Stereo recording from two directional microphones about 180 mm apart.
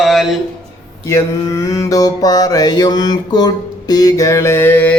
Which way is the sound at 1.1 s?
15° left (ahead or behind).